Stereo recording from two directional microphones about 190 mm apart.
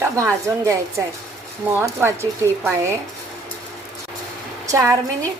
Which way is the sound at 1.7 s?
15° right (ahead or behind).